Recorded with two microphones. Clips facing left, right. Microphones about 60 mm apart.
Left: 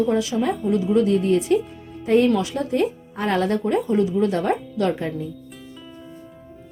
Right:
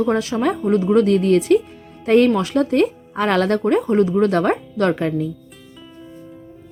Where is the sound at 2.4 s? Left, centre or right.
Right.